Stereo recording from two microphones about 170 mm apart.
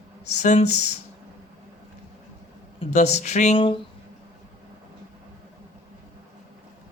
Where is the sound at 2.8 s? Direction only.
40° left (ahead or behind).